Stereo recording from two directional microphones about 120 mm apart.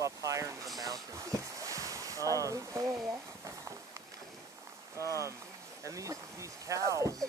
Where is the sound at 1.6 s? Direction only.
25° right (ahead or behind).